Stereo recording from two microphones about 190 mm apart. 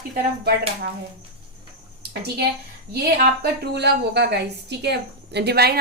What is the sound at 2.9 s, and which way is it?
A woman's voice, 60° right (ahead or behind).